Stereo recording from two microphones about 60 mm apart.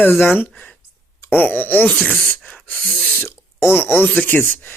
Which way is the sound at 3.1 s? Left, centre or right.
Left.